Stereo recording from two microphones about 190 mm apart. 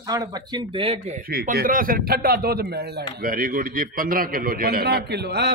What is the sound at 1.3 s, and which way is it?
A man's voice, 50° right (ahead or behind).